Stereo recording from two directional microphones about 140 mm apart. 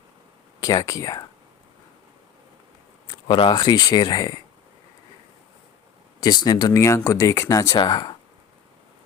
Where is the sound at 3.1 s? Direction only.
35° left (ahead or behind).